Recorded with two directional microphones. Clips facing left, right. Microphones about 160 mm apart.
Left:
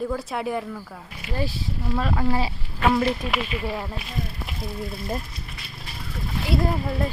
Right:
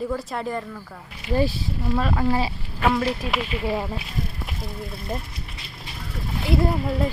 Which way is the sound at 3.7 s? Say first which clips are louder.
Right 4 dB; 20° right (ahead or behind).